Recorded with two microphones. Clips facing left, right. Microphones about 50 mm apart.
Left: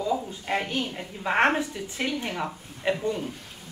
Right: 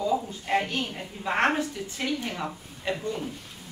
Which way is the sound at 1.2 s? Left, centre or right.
Centre.